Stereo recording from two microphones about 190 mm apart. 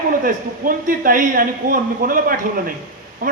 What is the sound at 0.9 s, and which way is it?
A man's voice, 45° right (ahead or behind).